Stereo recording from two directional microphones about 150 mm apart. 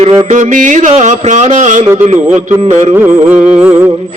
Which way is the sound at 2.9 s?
10° right (ahead or behind).